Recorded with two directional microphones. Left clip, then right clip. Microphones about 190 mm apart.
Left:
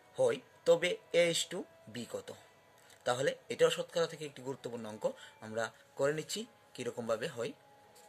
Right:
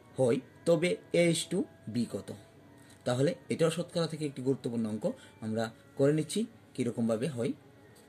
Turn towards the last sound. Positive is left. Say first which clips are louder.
# right 4 dB
turn(degrees=30)  # may be behind; listen again after turning